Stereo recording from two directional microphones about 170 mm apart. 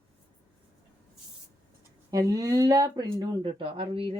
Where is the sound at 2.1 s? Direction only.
20° right (ahead or behind).